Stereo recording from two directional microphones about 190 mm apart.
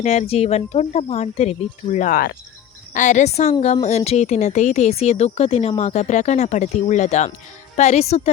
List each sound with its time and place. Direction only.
0.0 s speech: 35° left (ahead or behind)